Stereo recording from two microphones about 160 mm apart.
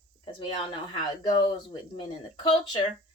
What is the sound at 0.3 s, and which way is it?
A woman's voice, 35° left (ahead or behind).